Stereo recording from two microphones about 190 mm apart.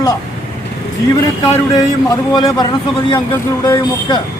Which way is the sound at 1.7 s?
20° left (ahead or behind).